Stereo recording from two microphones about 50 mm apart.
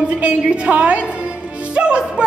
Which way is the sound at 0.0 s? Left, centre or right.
Right.